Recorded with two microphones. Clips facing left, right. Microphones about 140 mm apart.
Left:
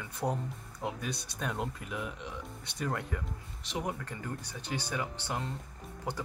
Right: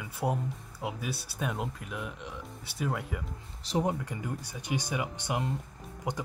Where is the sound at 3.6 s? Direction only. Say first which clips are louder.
Right 7 dB; 35° right (ahead or behind).